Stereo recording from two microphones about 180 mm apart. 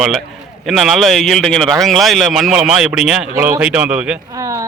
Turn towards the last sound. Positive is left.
turn(degrees=-20)  # may be behind; listen again after turning